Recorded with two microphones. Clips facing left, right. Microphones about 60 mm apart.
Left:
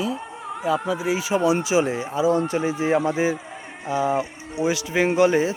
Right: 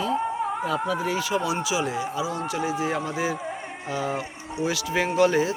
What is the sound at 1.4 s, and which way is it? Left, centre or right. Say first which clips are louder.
Speech: left 6 dB; left.